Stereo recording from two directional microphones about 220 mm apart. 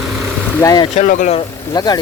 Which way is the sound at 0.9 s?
35° left (ahead or behind).